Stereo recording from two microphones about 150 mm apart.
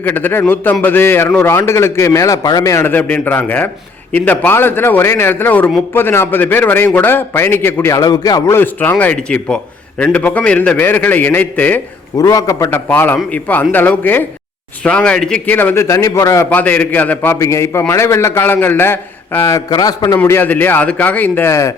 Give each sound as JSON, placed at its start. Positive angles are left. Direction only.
{"t": 0.0, "sound": "a man's voice", "side_deg": 10}
{"t": 12.1, "sound": "a man's voice", "side_deg": 25}
{"t": 20.1, "sound": "a man's voice", "side_deg": 15}